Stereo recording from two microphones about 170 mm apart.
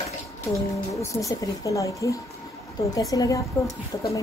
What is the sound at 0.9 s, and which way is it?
Speech, 20° left (ahead or behind).